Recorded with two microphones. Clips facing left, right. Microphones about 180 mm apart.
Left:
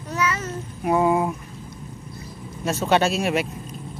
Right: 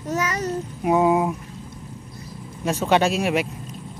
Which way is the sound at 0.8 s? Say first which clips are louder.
Right 1 dB; 5° right (ahead or behind).